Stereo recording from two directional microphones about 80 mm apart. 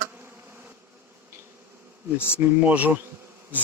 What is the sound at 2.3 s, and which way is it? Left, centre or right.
Speech, right.